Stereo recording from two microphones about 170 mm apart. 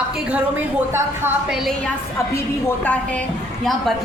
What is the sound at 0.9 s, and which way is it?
Speech, 15° right (ahead or behind).